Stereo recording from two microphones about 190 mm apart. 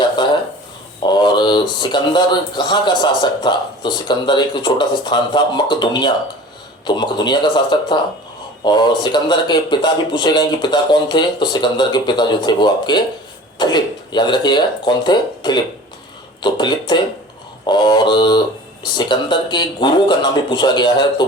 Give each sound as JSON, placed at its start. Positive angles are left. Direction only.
{"t": 1.0, "sound": "speech", "side_deg": 25}